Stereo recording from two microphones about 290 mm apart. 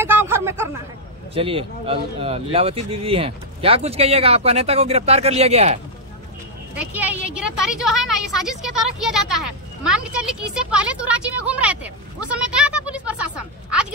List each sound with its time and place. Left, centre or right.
0.0 s a sound: centre
1.3 s speech: centre
6.7 s a woman's voice: centre